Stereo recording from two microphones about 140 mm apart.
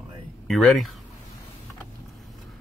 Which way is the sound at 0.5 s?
Centre (ahead or behind).